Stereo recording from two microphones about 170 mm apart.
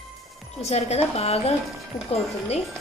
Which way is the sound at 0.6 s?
40° left (ahead or behind).